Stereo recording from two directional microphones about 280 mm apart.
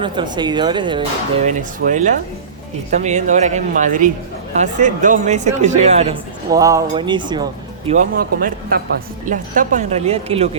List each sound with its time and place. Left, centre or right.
0.0 s speech: centre
7.9 s speech: right